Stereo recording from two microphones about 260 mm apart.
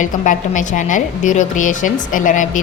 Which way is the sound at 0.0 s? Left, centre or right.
Left.